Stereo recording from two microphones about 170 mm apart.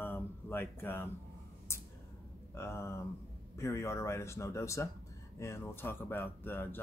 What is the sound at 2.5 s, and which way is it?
Speech, 15° left (ahead or behind).